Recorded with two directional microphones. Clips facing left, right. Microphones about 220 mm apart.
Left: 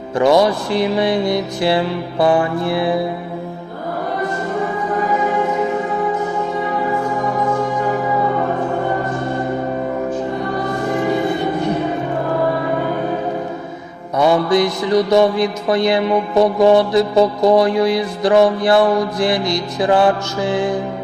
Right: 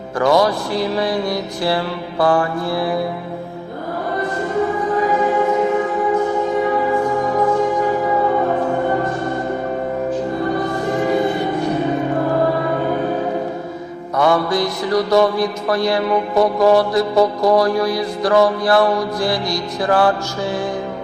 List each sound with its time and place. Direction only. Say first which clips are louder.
0.2 s mantra: left 2 dB; 25° left (ahead or behind)
14.2 s mantra: left 3 dB; 20° left (ahead or behind)